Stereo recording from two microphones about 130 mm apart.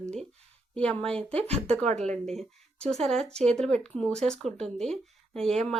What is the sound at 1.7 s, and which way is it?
Speech, 60° right (ahead or behind).